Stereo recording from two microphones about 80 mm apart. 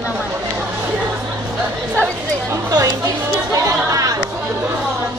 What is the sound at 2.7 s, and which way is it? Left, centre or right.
Chatter, right.